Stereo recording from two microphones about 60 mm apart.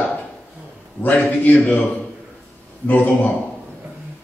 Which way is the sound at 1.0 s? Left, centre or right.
Left.